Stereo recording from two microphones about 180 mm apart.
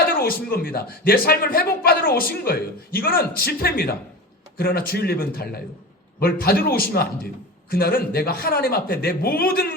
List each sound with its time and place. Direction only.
0.1 s a man's voice: 55° left (ahead or behind)